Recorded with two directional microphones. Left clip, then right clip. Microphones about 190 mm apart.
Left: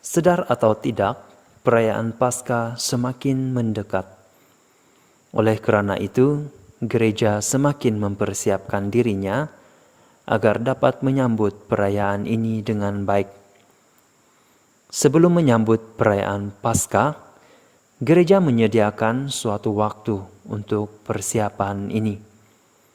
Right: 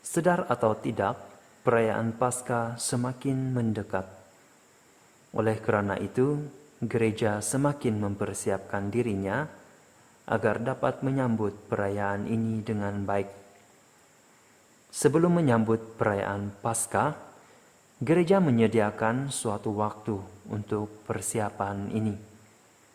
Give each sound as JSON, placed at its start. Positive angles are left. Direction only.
{"t": 0.0, "sound": "speech", "side_deg": 30}
{"t": 5.3, "sound": "speech", "side_deg": 35}
{"t": 14.8, "sound": "speech", "side_deg": 30}